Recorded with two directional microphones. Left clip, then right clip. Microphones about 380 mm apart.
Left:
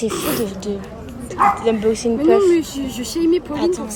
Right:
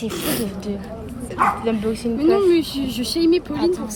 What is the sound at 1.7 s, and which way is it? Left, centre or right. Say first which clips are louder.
Speech: left 5 dB; centre.